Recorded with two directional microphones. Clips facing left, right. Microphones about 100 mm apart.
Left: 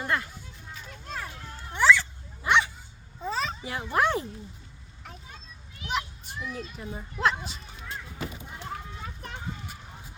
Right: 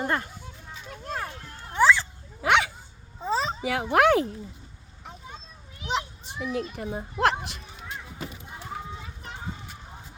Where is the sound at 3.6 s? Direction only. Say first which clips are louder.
Right 6 dB; 90° right.